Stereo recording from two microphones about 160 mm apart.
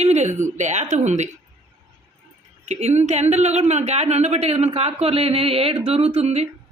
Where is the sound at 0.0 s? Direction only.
45° right (ahead or behind).